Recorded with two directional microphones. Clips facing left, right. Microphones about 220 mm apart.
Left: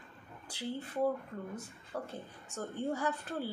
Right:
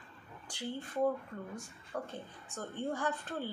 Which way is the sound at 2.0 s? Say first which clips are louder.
Even; 10° left (ahead or behind).